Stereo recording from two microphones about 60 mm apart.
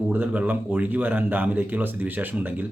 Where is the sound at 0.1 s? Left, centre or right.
Right.